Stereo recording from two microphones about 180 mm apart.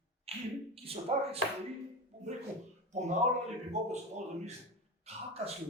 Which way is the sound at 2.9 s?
40° right (ahead or behind).